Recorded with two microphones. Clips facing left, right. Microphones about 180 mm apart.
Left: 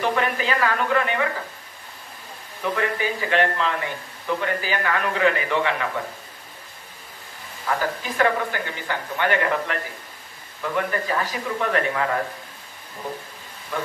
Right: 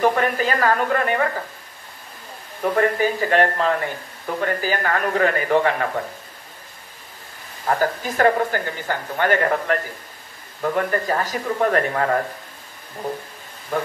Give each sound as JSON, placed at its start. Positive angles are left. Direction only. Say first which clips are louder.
{"t": 0.0, "sound": "a woman's voice", "louder": "right 4 dB", "side_deg": -45}
{"t": 2.6, "sound": "a woman's voice", "louder": "right 6 dB", "side_deg": -45}
{"t": 7.6, "sound": "a woman's voice", "louder": "right 4 dB", "side_deg": -45}